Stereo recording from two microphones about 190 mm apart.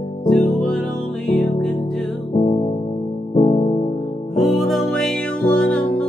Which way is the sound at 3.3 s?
30° left (ahead or behind).